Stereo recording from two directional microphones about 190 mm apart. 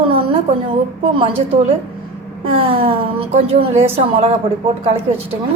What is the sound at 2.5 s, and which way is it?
A woman's voice, 30° right (ahead or behind).